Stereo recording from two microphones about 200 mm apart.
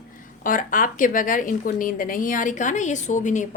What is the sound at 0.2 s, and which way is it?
Speech, 40° left (ahead or behind).